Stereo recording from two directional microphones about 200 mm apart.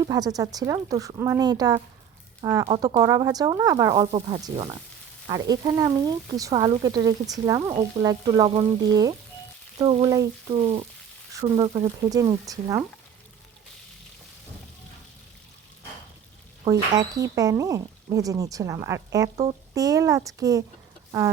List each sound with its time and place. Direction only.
0.0 s speech: 20° right (ahead or behind)
4.1 s speech: 30° right (ahead or behind)
5.3 s speech: 20° right (ahead or behind)
9.7 s speech: 30° right (ahead or behind)
12.1 s speech: 20° right (ahead or behind)
16.6 s speech: 20° right (ahead or behind)